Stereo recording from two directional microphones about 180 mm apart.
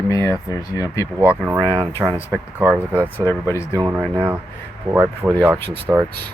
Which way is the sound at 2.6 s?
10° right (ahead or behind).